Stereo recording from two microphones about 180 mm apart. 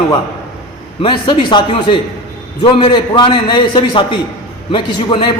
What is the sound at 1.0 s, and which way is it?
A man's voice, 25° left (ahead or behind).